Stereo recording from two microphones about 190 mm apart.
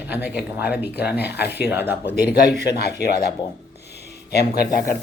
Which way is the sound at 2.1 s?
55° left (ahead or behind).